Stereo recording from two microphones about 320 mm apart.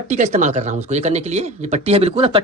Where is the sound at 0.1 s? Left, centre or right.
Right.